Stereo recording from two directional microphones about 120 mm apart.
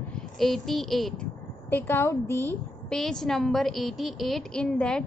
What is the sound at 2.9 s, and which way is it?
A woman's voice, 5° left (ahead or behind).